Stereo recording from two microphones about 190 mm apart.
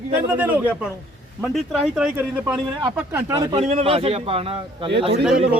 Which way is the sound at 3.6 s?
35° right (ahead or behind).